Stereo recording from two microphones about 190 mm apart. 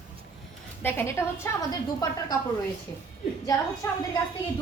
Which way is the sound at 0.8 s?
10° left (ahead or behind).